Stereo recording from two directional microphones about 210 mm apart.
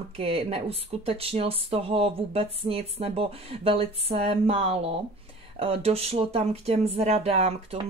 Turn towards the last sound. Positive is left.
turn(degrees=-30)  # may be behind; listen again after turning